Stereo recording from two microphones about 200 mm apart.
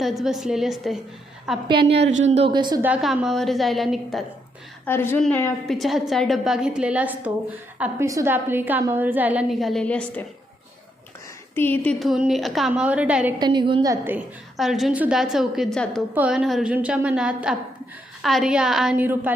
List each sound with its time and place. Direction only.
0.0 s a woman's voice: centre (ahead or behind)
1.6 s a woman's voice: 25° right (ahead or behind)
2.5 s a woman's voice: 20° right (ahead or behind)
2.8 s a woman's voice: 5° right (ahead or behind)
4.9 s a woman's voice: 10° left (ahead or behind)
11.5 s a woman's voice: 10° left (ahead or behind); by 13.3 s 5° right (ahead or behind)
13.4 s a woman's voice: 20° right (ahead or behind)
14.5 s a woman's voice: centre (ahead or behind)